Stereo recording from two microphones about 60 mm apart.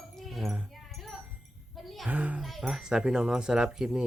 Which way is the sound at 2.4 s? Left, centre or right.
Centre.